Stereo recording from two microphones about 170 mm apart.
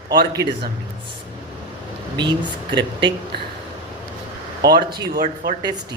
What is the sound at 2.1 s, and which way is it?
Speech, 30° right (ahead or behind).